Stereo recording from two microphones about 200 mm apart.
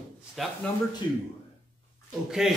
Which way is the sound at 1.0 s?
25° left (ahead or behind).